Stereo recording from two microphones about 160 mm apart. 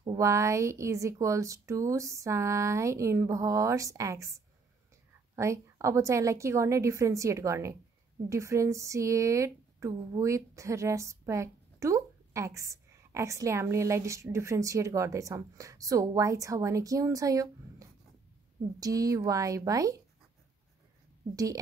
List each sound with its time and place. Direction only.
0.0 s speech: 20° right (ahead or behind)
5.3 s speech: 20° right (ahead or behind)